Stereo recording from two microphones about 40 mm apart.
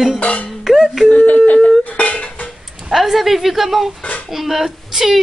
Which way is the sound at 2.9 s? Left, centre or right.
Centre.